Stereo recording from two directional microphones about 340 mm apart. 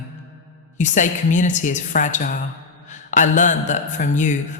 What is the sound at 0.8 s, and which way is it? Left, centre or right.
A woman's voice, left.